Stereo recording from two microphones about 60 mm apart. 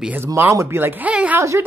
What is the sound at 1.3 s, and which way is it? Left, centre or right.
Speech, right.